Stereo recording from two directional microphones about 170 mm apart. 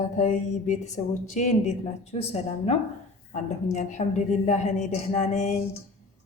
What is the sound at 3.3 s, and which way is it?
A woman's voice, 45° left (ahead or behind).